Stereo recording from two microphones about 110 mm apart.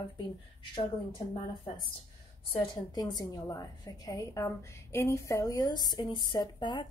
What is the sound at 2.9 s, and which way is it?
Speech, 40° left (ahead or behind).